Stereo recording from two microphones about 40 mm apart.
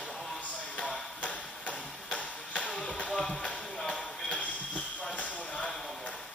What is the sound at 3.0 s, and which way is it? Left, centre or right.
Music, centre.